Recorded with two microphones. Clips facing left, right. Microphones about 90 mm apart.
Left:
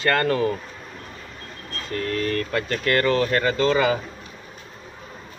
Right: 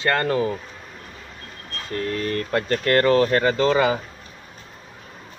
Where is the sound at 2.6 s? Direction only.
40° right (ahead or behind).